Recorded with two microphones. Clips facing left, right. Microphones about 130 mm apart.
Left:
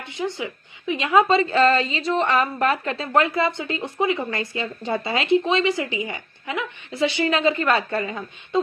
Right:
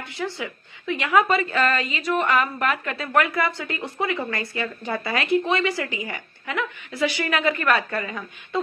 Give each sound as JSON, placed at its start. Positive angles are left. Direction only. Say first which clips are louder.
{"t": 0.0, "sound": "a woman's voice", "louder": "left 2 dB", "side_deg": 20}